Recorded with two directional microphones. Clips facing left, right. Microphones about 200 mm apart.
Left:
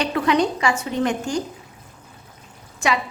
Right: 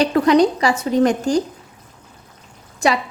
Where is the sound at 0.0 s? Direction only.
40° right (ahead or behind).